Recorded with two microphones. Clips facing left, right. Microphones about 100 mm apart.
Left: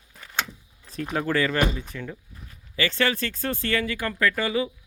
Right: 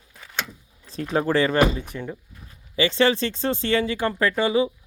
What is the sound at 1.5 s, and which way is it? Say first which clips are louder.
Speech: right 5 dB; 75° right (ahead or behind).